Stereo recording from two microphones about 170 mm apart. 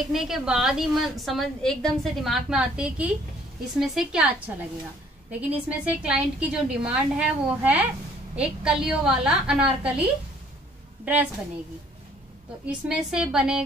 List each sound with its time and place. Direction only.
0.1 s a woman's voice: centre (ahead or behind)
12.6 s a woman's voice: 5° right (ahead or behind)